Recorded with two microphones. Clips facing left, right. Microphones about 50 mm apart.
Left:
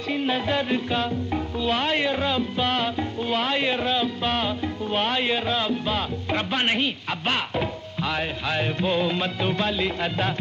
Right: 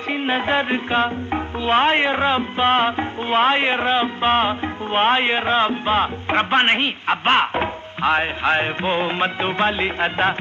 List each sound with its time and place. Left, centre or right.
0.1 s music: right